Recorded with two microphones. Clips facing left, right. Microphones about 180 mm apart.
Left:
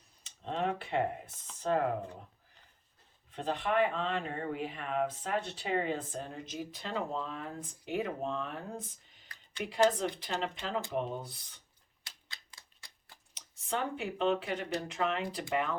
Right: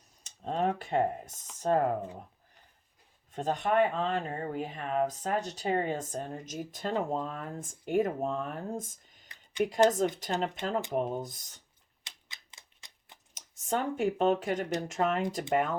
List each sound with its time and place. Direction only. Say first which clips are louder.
0.2 s speech: right 4 dB; 45° right (ahead or behind)
3.3 s speech: right 4 dB; 45° right (ahead or behind)
9.3 s a sound: right 10 dB; 15° right (ahead or behind)
10.0 s speech: right 5 dB; 45° right (ahead or behind)
12.0 s typewriter: even; 20° right (ahead or behind)
13.3 s speech: right 4 dB; 45° right (ahead or behind)